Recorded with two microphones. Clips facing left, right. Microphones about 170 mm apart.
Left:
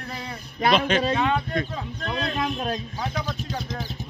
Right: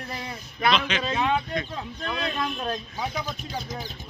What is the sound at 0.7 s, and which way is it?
Speech, 50° left (ahead or behind).